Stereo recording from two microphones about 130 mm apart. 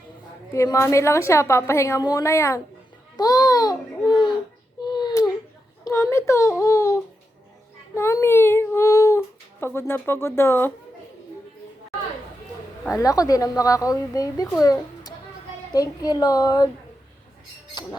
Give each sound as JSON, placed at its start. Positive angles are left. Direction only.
{"t": 0.5, "sound": "a woman's voice", "side_deg": 25}
{"t": 4.8, "sound": "a sound", "side_deg": 35}
{"t": 5.8, "sound": "a child's voice", "side_deg": 20}
{"t": 12.9, "sound": "a woman's voice", "side_deg": 25}